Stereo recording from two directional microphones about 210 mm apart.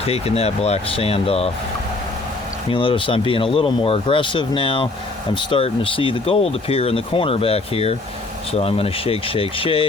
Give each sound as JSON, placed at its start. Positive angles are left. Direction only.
{"t": 0.0, "sound": "speech", "side_deg": 30}
{"t": 2.6, "sound": "speech", "side_deg": 25}